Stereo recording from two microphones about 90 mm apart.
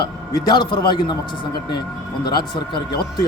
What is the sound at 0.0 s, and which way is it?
A man's voice, 50° left (ahead or behind).